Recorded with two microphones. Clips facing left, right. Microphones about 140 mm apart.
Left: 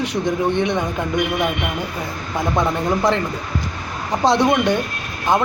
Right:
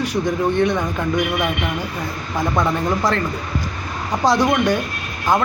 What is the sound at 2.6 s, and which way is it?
Speech, 20° left (ahead or behind).